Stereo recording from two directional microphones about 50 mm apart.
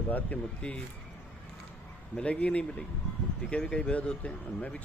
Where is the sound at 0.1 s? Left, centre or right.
Left.